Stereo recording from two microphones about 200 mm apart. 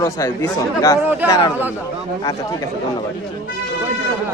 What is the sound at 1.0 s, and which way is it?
Speech, 10° right (ahead or behind).